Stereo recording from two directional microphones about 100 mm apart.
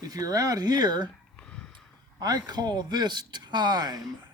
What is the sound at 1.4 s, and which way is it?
Snort, 10° left (ahead or behind).